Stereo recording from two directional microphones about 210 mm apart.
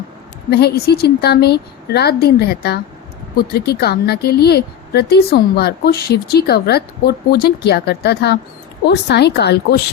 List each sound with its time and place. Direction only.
0.5 s a woman's voice: 50° left (ahead or behind)